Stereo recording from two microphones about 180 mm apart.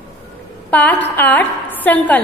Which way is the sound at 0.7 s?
10° left (ahead or behind).